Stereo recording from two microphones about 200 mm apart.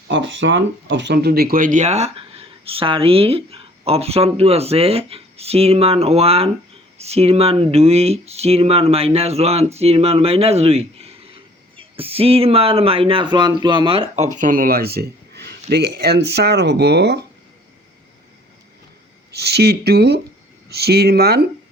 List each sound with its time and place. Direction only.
0.1 s speech: 65° right (ahead or behind); by 14.3 s 25° right (ahead or behind)
14.3 s speech: 45° right (ahead or behind)
19.3 s speech: 55° right (ahead or behind)